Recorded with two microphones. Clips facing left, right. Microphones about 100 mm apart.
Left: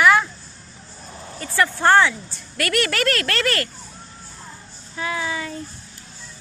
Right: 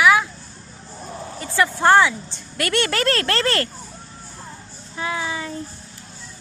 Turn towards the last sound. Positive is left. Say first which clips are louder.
# even
turn(degrees=-25)  # may be behind; listen again after turning